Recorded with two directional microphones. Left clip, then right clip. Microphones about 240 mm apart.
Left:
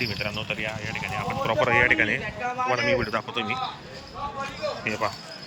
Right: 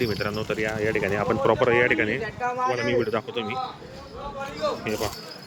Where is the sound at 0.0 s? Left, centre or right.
Centre.